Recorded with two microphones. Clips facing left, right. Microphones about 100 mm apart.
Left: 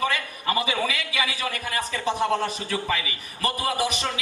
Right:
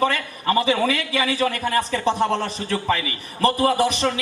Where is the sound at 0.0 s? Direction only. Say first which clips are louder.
Right 5 dB; 40° right (ahead or behind).